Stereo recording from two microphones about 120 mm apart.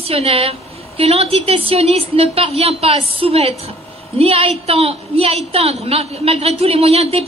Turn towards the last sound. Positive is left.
turn(degrees=-60)  # may be behind; listen again after turning